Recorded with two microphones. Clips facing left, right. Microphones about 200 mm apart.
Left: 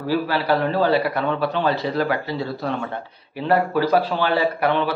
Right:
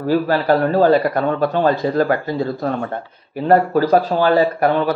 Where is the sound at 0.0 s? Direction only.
50° right (ahead or behind).